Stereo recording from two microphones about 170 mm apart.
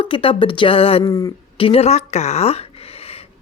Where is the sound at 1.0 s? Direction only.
20° left (ahead or behind).